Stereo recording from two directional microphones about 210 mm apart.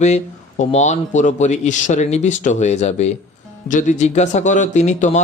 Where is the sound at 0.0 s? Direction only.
35° left (ahead or behind).